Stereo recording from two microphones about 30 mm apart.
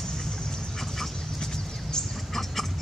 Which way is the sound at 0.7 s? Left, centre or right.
Centre.